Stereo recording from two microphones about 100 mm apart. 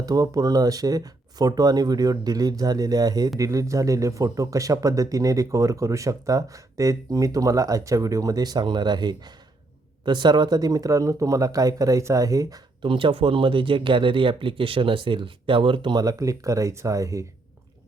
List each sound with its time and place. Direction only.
0.0 s speech: 40° right (ahead or behind)
12.8 s speech: 55° right (ahead or behind); by 17.2 s 35° right (ahead or behind)